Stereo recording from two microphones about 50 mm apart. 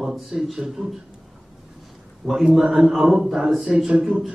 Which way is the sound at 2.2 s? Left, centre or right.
Centre.